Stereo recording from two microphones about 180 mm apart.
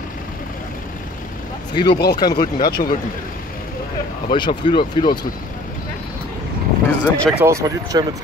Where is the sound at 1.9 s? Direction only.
65° left (ahead or behind).